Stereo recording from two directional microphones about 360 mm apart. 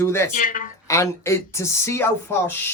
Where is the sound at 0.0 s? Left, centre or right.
Centre.